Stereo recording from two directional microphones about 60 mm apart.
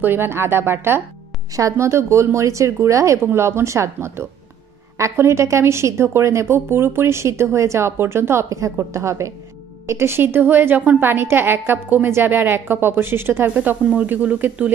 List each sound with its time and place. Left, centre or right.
0.0 s a woman's voice: right
1.5 s a woman's voice: right
3.3 s a woman's voice: right
8.5 s a woman's voice: right